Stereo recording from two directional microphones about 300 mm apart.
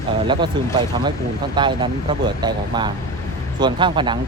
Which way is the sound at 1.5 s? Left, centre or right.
Centre.